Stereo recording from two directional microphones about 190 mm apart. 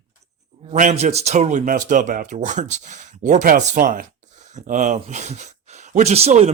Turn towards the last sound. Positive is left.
turn(degrees=-35)  # may be behind; listen again after turning